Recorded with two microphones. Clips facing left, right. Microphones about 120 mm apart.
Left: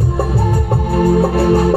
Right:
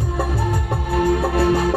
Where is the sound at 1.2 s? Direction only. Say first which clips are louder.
Left 5 dB; 30° left (ahead or behind).